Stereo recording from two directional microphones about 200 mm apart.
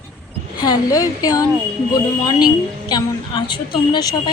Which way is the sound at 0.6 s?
20° left (ahead or behind).